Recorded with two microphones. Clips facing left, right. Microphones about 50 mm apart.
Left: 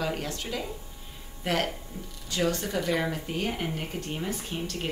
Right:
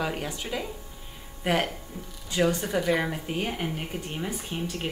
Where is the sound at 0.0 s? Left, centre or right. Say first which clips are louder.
Right 1 dB; centre.